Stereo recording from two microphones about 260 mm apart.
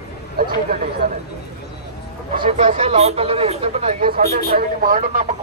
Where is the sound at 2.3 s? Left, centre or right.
Right.